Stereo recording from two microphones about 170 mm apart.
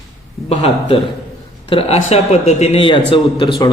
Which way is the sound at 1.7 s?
35° left (ahead or behind).